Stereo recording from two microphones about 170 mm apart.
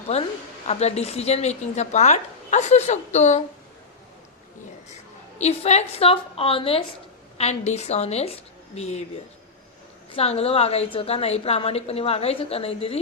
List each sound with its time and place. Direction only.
0.1 s a woman's voice: 40° left (ahead or behind)
5.4 s a woman's voice: 40° left (ahead or behind)
10.1 s a woman's voice: 35° left (ahead or behind)